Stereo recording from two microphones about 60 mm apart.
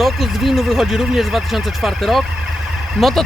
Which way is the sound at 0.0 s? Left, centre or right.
Centre.